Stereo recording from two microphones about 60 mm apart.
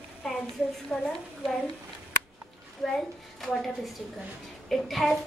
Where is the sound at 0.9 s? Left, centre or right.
Left.